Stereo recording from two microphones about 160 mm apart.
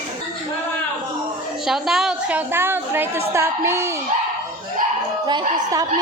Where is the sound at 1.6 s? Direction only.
Centre (ahead or behind); by 3.9 s 15° right (ahead or behind).